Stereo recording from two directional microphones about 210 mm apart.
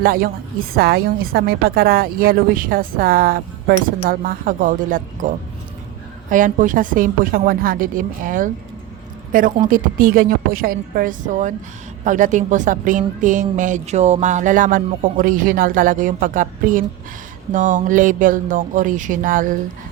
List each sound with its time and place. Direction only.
0.0 s a woman's voice: 45° right (ahead or behind)
6.3 s a woman's voice: 40° right (ahead or behind)